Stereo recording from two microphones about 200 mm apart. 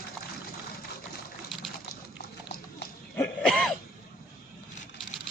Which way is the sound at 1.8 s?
50° left (ahead or behind).